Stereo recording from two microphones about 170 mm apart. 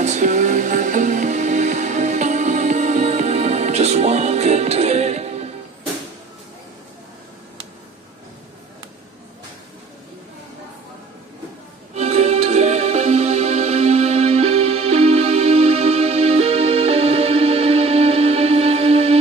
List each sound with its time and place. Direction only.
0.0 s music: 45° right (ahead or behind)
11.9 s music: 40° right (ahead or behind)